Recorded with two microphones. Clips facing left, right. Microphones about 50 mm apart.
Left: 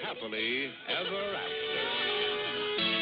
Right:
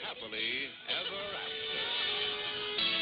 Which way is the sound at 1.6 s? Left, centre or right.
Centre.